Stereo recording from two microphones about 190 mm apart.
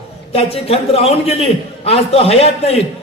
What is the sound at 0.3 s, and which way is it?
A man's voice, 30° left (ahead or behind).